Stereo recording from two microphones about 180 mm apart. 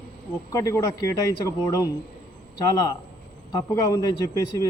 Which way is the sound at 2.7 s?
20° left (ahead or behind).